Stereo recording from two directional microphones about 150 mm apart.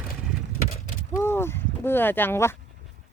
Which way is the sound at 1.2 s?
15° left (ahead or behind).